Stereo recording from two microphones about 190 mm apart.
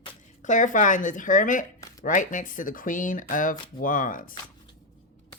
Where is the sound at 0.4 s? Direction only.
40° left (ahead or behind).